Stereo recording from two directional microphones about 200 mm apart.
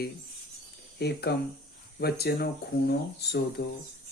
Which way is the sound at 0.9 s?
55° left (ahead or behind).